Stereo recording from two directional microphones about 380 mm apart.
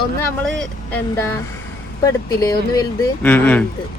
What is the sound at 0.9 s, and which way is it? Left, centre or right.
Speech, centre.